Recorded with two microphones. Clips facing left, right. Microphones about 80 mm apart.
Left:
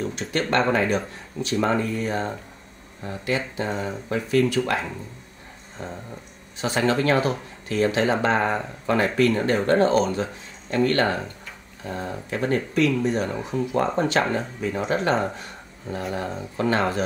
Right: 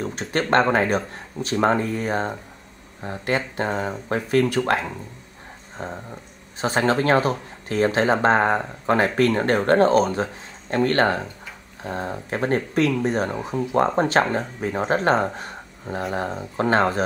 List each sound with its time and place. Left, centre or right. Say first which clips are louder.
0.0 s speech: right 1 dB; right
3.3 s mantra: right 2 dB; right
5.8 s speech: right 2 dB; right
13.5 s speech: left 1 dB; right
13.9 s speech: right 2 dB; right